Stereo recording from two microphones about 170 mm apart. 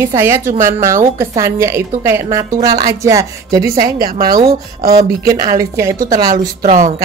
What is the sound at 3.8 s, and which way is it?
Speech, 60° right (ahead or behind).